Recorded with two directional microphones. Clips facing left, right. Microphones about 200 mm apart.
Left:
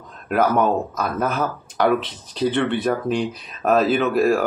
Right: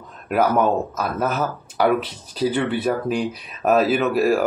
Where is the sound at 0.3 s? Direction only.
5° right (ahead or behind).